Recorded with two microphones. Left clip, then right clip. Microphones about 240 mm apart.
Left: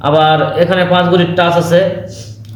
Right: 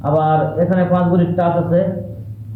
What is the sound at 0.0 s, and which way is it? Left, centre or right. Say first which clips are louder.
A man's voice: left 6 dB; left.